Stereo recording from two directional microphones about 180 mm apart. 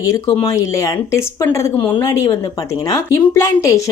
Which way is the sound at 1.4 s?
20° left (ahead or behind).